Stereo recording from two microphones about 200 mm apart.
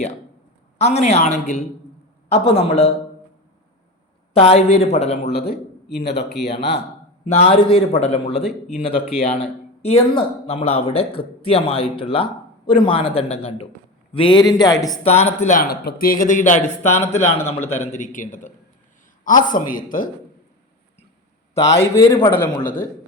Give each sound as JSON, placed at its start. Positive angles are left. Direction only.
{"t": 0.8, "sound": "a man's voice", "side_deg": 30}
{"t": 4.4, "sound": "a man's voice", "side_deg": 30}
{"t": 5.3, "sound": "a man's voice", "side_deg": 55}
{"t": 7.3, "sound": "a man's voice", "side_deg": 30}
{"t": 15.0, "sound": "a man's voice", "side_deg": 30}
{"t": 17.2, "sound": "a man's voice", "side_deg": 10}
{"t": 17.7, "sound": "a man's voice", "side_deg": 35}
{"t": 21.8, "sound": "a man's voice", "side_deg": 15}